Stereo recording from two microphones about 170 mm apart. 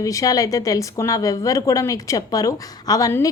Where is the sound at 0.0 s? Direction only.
20° left (ahead or behind).